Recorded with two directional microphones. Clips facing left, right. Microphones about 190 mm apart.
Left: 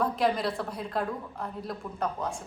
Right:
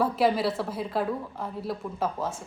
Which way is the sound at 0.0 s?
5° right (ahead or behind).